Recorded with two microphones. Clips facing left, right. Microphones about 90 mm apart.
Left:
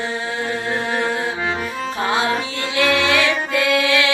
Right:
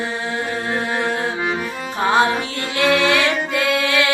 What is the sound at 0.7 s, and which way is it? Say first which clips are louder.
Music: right 1 dB; 20° right (ahead or behind).